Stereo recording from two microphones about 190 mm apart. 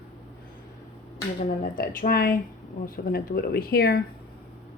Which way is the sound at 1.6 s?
45° left (ahead or behind).